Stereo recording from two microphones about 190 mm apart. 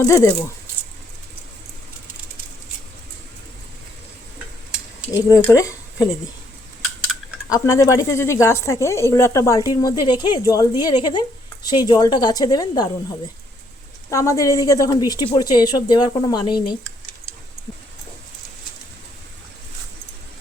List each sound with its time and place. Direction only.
0.0 s speech: 15° left (ahead or behind)
5.3 s speech: 15° left (ahead or behind)
7.6 s speech: 15° left (ahead or behind)